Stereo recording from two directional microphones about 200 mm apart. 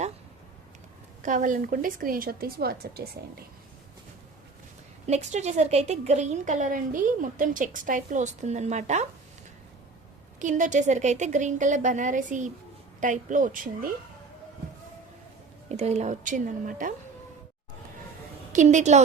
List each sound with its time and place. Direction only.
1.2 s speech: 40° right (ahead or behind)
5.0 s a woman's voice: 35° right (ahead or behind)
10.4 s a woman's voice: 40° right (ahead or behind)
15.7 s a woman's voice: 35° right (ahead or behind)
18.5 s a woman's voice: 35° right (ahead or behind)